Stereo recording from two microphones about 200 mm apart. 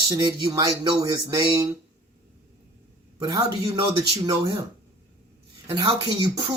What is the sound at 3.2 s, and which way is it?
Speech, 20° right (ahead or behind).